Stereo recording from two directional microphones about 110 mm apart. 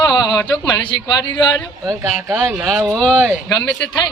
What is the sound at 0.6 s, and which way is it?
A woman's voice, 40° left (ahead or behind).